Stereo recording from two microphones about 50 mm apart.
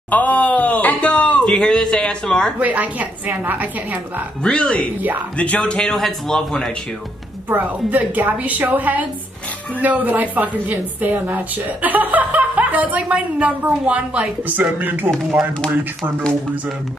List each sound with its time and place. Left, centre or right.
0.1 s a sound: left
1.6 s a sound: centre
2.6 s a woman's voice: right
4.4 s a man's voice: centre
7.4 s a woman's voice: right
14.8 s a woman's voice: right